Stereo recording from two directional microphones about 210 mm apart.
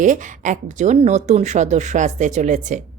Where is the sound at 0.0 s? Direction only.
35° right (ahead or behind).